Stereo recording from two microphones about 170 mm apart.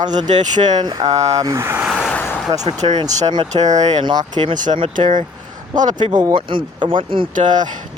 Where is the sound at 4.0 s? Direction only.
25° right (ahead or behind).